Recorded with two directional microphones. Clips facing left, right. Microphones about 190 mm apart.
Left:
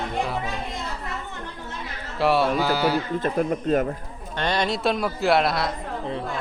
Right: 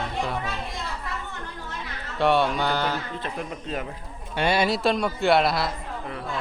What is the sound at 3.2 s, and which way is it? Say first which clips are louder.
Speech: left 9 dB; 45° left (ahead or behind).